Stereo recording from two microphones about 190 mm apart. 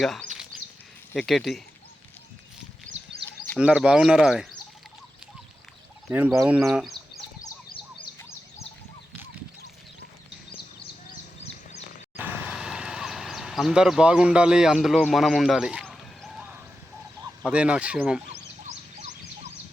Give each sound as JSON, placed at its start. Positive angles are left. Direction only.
{"t": 0.0, "sound": "a sound", "side_deg": 0}
{"t": 1.1, "sound": "speech", "side_deg": 0}
{"t": 2.9, "sound": "sheep", "side_deg": -90}
{"t": 3.6, "sound": "speech", "side_deg": -5}
{"t": 6.1, "sound": "speech", "side_deg": -10}
{"t": 12.1, "sound": "a sound", "side_deg": -10}
{"t": 17.4, "sound": "speech", "side_deg": -5}